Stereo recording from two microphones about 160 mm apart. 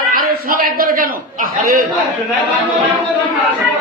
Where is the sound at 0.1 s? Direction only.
65° right (ahead or behind).